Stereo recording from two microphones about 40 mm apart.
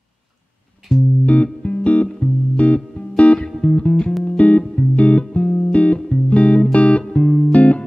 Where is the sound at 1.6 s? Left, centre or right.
Left.